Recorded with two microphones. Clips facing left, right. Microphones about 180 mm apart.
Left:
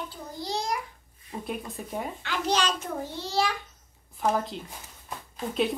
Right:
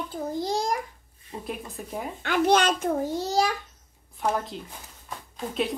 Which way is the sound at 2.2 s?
55° right (ahead or behind).